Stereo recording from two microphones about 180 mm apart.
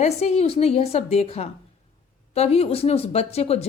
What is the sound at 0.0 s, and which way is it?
Speech, 35° left (ahead or behind).